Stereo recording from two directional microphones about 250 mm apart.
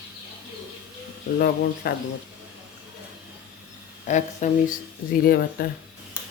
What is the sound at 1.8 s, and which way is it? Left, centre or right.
Speech, left.